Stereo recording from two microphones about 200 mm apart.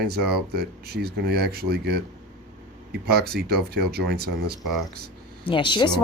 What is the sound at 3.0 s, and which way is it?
Speech, 55° right (ahead or behind).